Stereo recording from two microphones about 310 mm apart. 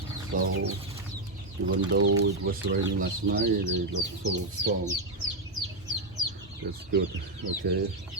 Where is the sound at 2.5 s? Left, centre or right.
Right.